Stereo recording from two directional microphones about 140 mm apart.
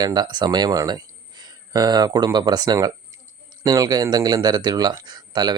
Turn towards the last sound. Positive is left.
turn(degrees=-30)  # may be behind; listen again after turning